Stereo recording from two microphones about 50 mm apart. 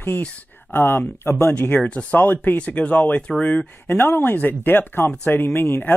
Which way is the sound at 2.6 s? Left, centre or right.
Left.